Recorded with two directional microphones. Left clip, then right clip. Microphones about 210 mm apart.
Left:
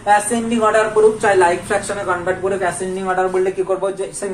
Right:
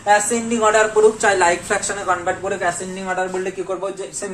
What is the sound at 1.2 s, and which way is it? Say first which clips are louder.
Speech: left 2 dB; 40° right (ahead or behind).